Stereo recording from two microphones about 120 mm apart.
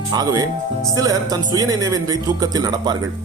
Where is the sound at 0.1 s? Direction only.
30° right (ahead or behind).